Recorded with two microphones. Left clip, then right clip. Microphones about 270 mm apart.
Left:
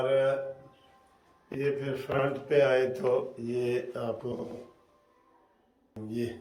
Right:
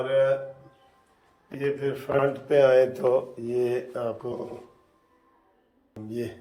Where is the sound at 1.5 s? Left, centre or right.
Centre.